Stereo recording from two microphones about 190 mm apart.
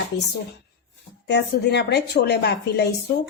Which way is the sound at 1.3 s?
60° left (ahead or behind).